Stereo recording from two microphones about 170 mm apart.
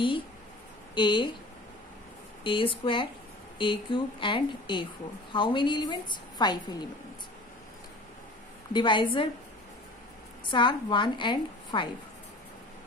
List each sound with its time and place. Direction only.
0.9 s a woman's voice: 25° left (ahead or behind)
2.4 s a woman's voice: 30° left (ahead or behind)
8.7 s a woman's voice: 30° left (ahead or behind)
10.4 s a woman's voice: 30° left (ahead or behind)